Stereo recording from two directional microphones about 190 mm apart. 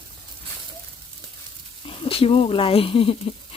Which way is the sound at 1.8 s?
30° left (ahead or behind).